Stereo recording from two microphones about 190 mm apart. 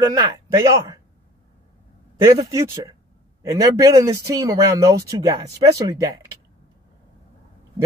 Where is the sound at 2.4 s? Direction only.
15° right (ahead or behind).